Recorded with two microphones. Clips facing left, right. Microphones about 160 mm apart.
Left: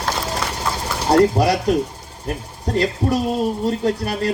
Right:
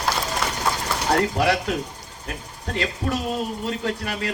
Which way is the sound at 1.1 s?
35° left (ahead or behind).